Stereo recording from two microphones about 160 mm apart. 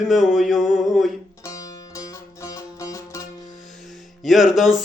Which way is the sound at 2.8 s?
20° left (ahead or behind).